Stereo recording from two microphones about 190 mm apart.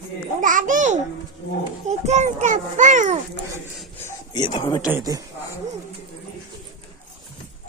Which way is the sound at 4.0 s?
15° left (ahead or behind).